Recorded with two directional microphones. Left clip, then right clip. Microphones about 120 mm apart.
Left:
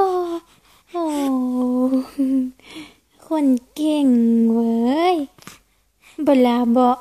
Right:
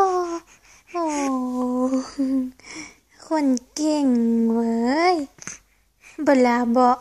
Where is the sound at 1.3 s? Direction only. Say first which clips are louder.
Left 3 dB; 40° left (ahead or behind).